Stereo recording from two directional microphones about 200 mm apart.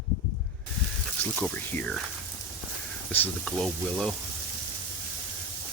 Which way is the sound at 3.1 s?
5° left (ahead or behind).